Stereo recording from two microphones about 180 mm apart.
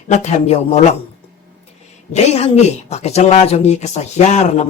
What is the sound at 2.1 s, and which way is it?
Speech, 35° left (ahead or behind).